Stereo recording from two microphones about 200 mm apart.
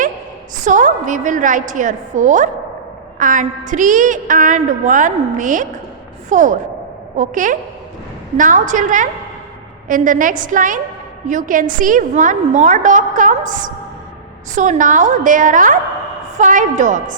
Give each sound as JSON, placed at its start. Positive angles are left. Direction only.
{"t": 0.6, "sound": "a woman's voice", "side_deg": -40}